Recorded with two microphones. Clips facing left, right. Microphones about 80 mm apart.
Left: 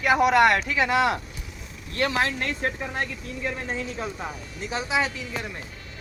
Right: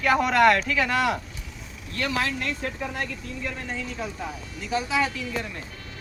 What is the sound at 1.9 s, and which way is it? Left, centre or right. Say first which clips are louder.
Speech: left 2 dB; left.